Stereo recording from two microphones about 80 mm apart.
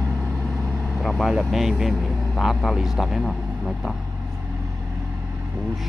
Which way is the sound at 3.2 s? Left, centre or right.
Centre.